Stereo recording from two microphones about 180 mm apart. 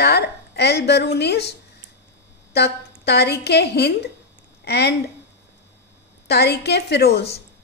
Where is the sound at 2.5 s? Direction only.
65° left (ahead or behind).